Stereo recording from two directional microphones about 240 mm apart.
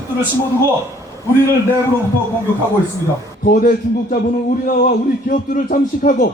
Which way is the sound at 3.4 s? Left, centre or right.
Left.